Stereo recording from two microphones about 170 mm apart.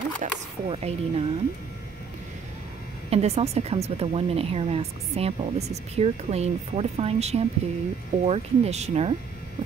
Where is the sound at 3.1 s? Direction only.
40° right (ahead or behind).